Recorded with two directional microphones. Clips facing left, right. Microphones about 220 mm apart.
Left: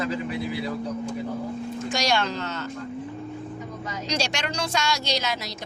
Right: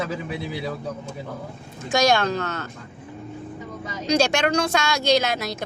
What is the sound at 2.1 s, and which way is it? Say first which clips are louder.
Speech: right 4 dB; 55° right (ahead or behind).